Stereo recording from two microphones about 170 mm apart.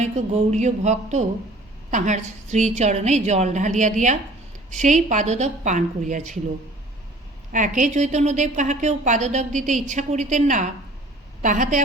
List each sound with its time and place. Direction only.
0.0 s a woman's voice: 40° right (ahead or behind)
7.5 s a woman's voice: 50° right (ahead or behind)